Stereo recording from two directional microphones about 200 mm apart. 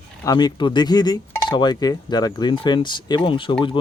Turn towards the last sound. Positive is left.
turn(degrees=25)  # may be behind; listen again after turning